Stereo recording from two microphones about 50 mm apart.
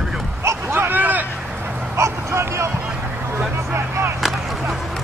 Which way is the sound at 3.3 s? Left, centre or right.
Right.